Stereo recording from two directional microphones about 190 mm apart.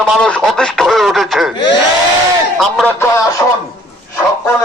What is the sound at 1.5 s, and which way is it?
Speech, 65° left (ahead or behind).